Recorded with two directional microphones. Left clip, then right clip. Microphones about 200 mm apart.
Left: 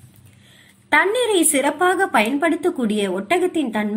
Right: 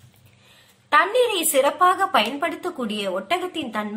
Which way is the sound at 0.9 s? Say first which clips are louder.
Left 1 dB; 10° left (ahead or behind).